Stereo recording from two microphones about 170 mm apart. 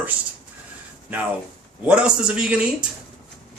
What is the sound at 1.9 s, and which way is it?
Speech, 5° right (ahead or behind).